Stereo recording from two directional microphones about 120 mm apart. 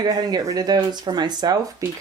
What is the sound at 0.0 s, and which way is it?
A woman's voice, 35° right (ahead or behind).